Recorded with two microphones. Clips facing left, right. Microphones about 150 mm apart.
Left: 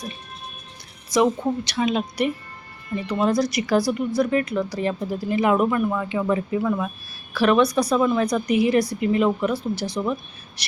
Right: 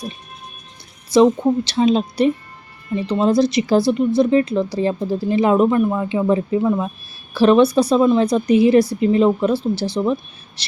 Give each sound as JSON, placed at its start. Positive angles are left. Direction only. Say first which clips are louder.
{"t": 1.4, "sound": "speech", "louder": "right 7 dB", "side_deg": -30}